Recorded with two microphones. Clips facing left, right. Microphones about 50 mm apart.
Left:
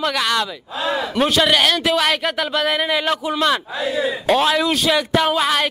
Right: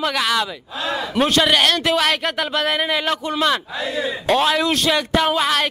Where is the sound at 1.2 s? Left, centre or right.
Centre.